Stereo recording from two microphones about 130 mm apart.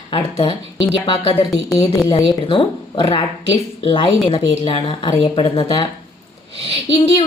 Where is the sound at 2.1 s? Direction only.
40° left (ahead or behind).